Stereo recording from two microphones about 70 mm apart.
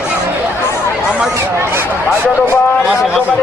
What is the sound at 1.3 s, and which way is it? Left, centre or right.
Speech, right.